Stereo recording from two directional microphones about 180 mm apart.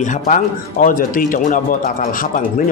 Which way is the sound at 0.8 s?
50° left (ahead or behind).